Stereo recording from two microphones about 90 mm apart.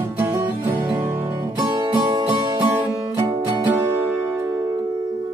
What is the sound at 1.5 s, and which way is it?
Music, 50° right (ahead or behind).